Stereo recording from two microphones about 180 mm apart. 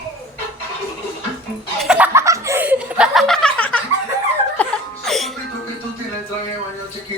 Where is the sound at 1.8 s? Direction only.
5° right (ahead or behind).